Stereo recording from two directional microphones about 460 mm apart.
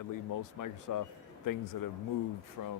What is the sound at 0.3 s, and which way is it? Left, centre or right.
Speech, left.